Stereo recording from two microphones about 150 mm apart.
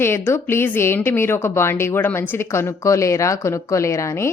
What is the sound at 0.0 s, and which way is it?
A woman's voice, 15° left (ahead or behind).